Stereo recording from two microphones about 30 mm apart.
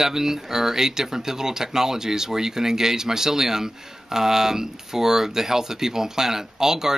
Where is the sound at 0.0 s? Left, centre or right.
Centre.